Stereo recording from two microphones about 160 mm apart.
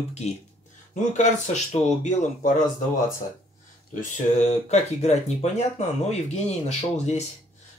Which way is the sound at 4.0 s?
45° left (ahead or behind).